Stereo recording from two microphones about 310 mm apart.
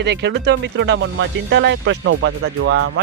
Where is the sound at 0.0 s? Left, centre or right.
Right.